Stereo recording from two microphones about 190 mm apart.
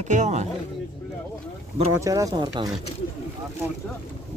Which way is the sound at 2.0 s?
15° right (ahead or behind).